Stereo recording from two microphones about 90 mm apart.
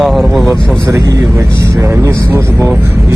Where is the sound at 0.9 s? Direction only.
35° right (ahead or behind).